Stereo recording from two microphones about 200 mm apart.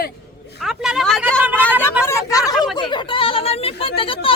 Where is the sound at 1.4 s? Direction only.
10° right (ahead or behind).